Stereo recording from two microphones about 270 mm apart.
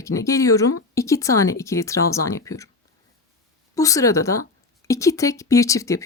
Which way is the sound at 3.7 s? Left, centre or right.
Centre.